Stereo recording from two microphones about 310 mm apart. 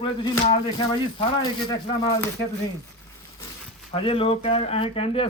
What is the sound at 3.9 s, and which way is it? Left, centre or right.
A man's voice, centre.